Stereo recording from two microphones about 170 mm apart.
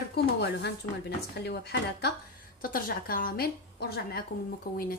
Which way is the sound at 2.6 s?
55° left (ahead or behind).